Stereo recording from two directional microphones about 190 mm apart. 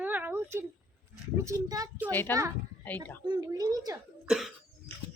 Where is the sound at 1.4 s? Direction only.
15° right (ahead or behind).